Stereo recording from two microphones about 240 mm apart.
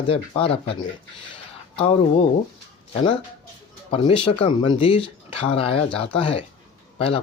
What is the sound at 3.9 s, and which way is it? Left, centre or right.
Speech, left.